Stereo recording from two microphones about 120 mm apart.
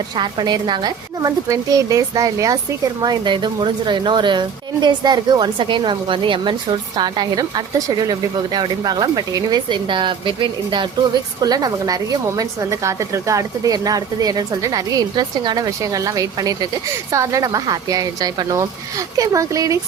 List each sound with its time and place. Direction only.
0.2 s speech: 35° right (ahead or behind)